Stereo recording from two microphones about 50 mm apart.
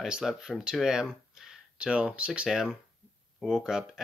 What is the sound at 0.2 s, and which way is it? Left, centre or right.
Speech, centre.